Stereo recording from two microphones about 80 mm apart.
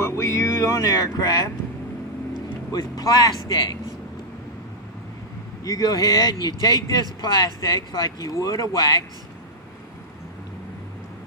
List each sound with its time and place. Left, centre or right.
0.0 s music: left
2.7 s speech: left
5.6 s speech: left